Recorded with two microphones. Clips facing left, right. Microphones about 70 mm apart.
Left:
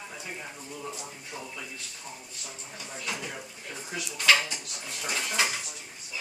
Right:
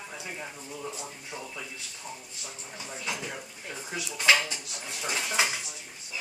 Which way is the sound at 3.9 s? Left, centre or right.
Centre.